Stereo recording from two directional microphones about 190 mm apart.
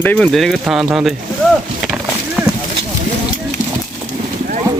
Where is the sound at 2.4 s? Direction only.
10° right (ahead or behind).